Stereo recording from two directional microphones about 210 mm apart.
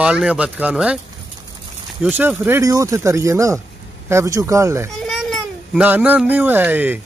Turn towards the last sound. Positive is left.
turn(degrees=-10)  # may be behind; listen again after turning